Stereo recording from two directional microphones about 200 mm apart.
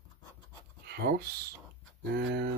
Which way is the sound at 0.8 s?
50° right (ahead or behind).